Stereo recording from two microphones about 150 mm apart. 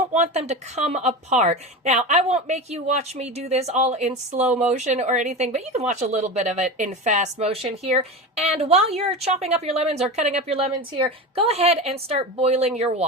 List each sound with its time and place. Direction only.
0.1 s speech: 50° right (ahead or behind)